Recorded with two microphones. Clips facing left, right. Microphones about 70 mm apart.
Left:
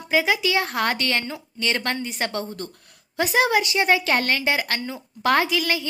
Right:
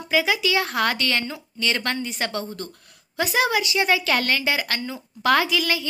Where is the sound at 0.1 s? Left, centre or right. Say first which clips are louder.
Left 1 dB; left.